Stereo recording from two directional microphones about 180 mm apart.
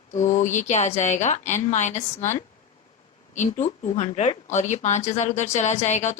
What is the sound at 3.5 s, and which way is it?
Speech, 40° left (ahead or behind).